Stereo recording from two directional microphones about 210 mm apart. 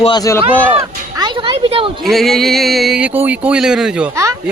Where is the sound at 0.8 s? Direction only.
20° right (ahead or behind).